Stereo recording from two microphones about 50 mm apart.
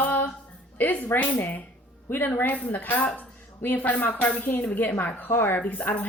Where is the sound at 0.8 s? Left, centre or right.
Left.